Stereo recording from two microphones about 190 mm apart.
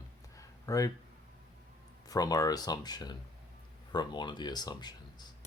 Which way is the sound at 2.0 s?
20° left (ahead or behind).